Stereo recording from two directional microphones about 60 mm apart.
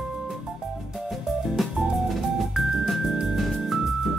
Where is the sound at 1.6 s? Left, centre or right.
Centre.